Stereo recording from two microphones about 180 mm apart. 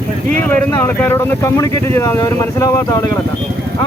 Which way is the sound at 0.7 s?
10° left (ahead or behind).